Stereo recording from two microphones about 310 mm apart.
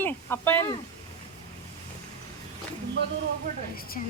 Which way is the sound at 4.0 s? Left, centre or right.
Left.